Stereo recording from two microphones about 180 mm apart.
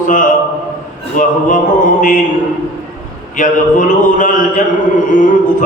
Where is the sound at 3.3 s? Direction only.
45° left (ahead or behind).